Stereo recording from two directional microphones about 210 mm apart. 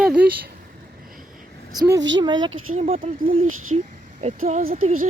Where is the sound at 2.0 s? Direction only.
60° right (ahead or behind).